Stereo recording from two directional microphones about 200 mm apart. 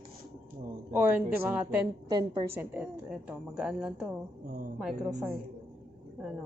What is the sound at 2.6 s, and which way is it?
A woman's voice, 5° right (ahead or behind).